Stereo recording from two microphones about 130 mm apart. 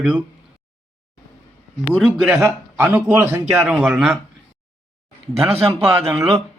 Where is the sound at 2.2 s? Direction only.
10° right (ahead or behind).